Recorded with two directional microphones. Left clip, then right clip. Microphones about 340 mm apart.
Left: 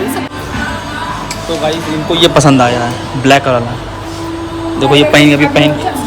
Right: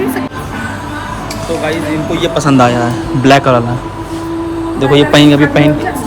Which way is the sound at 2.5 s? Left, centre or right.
Centre.